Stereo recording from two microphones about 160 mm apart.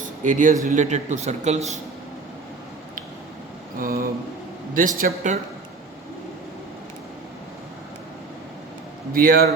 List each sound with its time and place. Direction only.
0.0 s a man's voice: 55° right (ahead or behind)
3.8 s a man's voice: 65° right (ahead or behind)
9.1 s a man's voice: 65° right (ahead or behind)